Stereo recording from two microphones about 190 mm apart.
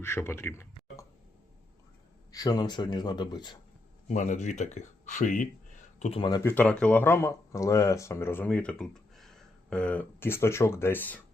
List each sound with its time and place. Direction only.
0.0 s speech: 15° left (ahead or behind)
2.3 s speech: 20° left (ahead or behind)
4.1 s speech: 40° left (ahead or behind)
6.0 s speech: 30° left (ahead or behind)
6.5 s speech: 10° left (ahead or behind)